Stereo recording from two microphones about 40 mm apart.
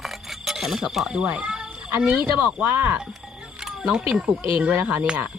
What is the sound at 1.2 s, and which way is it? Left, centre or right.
Speech, right.